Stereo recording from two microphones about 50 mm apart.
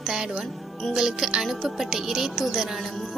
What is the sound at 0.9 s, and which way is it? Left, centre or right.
Speech, centre.